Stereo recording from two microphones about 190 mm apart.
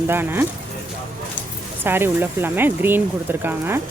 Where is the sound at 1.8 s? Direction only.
10° right (ahead or behind).